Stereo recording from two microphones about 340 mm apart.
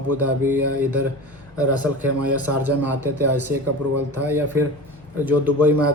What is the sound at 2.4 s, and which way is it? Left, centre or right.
A man's voice, centre.